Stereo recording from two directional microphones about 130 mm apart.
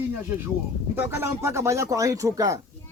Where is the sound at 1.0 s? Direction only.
20° right (ahead or behind).